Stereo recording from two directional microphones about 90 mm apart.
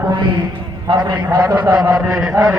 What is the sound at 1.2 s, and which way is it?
A man's voice, 40° right (ahead or behind).